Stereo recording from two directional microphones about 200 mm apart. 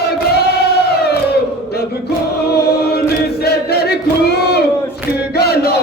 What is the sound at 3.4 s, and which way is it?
Choir, 50° left (ahead or behind).